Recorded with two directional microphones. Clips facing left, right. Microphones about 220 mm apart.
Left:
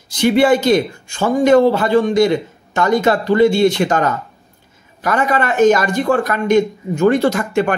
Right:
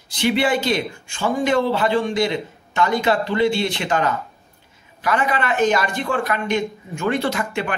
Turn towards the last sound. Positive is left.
turn(degrees=45)  # may be behind; listen again after turning